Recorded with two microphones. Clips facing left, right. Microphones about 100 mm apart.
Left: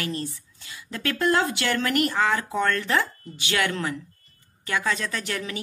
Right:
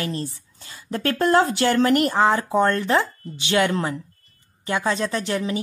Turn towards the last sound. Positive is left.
turn(degrees=-25)  # may be behind; listen again after turning